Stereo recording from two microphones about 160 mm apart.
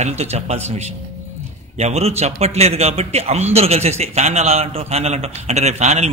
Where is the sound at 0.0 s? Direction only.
40° right (ahead or behind).